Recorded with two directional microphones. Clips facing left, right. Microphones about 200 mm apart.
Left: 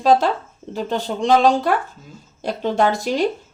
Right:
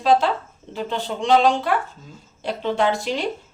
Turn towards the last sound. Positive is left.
turn(degrees=40)  # may be behind; listen again after turning